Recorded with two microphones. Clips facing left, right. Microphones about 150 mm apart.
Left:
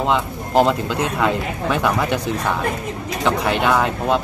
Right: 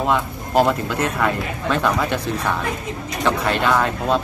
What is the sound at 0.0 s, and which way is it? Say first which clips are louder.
Speech: left 1 dB; 20° left (ahead or behind).